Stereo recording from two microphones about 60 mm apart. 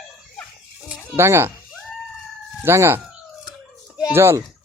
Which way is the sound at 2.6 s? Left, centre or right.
Right.